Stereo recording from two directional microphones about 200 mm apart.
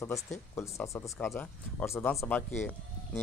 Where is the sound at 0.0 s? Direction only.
15° left (ahead or behind).